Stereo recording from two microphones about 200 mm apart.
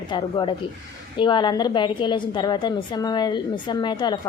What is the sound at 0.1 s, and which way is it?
A woman's voice, 25° left (ahead or behind).